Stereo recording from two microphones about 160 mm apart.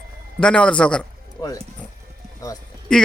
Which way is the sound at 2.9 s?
5° left (ahead or behind).